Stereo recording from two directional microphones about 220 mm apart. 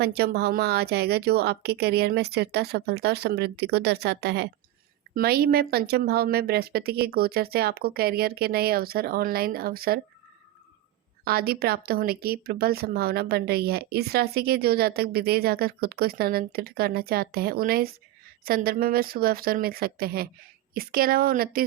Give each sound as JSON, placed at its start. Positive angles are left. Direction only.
{"t": 0.0, "sound": "speech", "side_deg": -45}
{"t": 11.3, "sound": "speech", "side_deg": -45}